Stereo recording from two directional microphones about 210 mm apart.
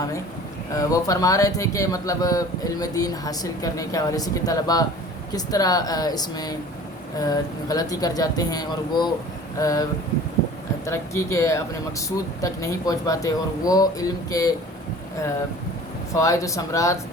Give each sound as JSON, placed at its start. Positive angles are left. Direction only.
{"t": 0.8, "sound": "speech", "side_deg": 15}
{"t": 10.8, "sound": "speech", "side_deg": 15}
{"t": 16.1, "sound": "speech", "side_deg": 15}